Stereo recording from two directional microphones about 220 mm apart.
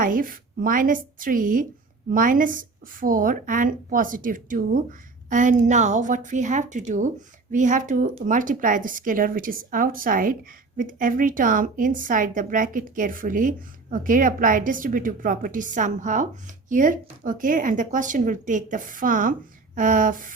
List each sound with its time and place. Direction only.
0.0 s speech: 40° right (ahead or behind)